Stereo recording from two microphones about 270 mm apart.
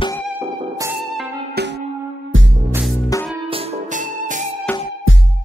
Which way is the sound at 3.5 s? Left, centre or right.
Right.